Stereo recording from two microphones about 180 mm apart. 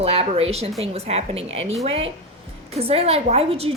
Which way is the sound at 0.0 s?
35° right (ahead or behind).